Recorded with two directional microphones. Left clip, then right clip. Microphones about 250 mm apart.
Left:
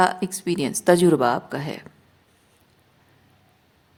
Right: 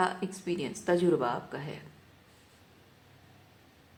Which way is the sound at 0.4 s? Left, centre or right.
Left.